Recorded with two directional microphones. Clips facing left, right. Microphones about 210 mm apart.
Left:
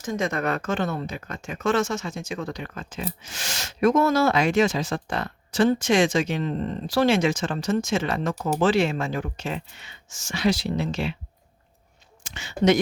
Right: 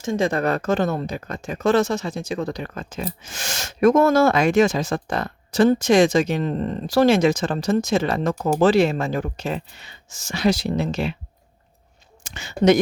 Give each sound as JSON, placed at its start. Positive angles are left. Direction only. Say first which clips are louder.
{"t": 0.0, "sound": "speech", "louder": "right 5 dB", "side_deg": -30}
{"t": 12.2, "sound": "speech", "louder": "right 3 dB", "side_deg": -45}